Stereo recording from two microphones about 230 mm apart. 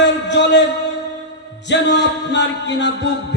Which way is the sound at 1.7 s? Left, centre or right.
Left.